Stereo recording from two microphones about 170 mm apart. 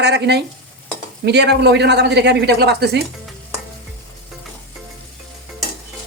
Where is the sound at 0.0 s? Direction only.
85° right.